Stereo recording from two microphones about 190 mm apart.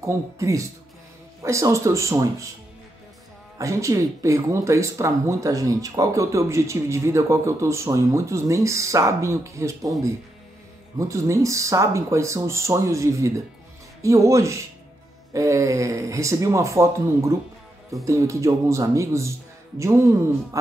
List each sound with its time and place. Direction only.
0.0 s speech: 15° right (ahead or behind)
3.5 s speech: 15° right (ahead or behind)
11.0 s speech: 15° right (ahead or behind)